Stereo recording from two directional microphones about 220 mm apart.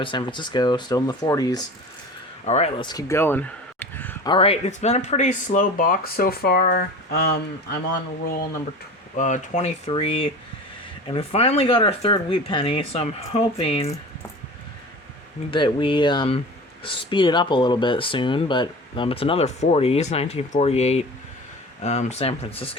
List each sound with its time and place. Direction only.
0.0 s speech: 20° left (ahead or behind)
2.4 s a sound: 30° left (ahead or behind); by 4.3 s 10° left (ahead or behind)
4.3 s speech: 25° left (ahead or behind); by 7.8 s 50° left (ahead or behind)
9.1 s speech: 35° left (ahead or behind)
15.4 s speech: 20° left (ahead or behind)